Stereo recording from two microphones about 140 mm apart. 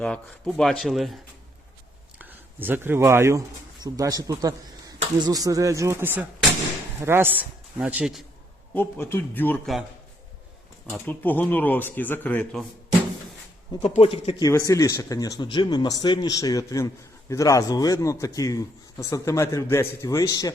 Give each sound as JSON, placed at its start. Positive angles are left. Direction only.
{"t": 0.0, "sound": "speech", "side_deg": 5}
{"t": 2.1, "sound": "speech", "side_deg": -15}
{"t": 8.7, "sound": "speech", "side_deg": 15}
{"t": 10.8, "sound": "speech", "side_deg": 10}
{"t": 13.8, "sound": "speech", "side_deg": 45}
{"t": 14.5, "sound": "speech", "side_deg": 20}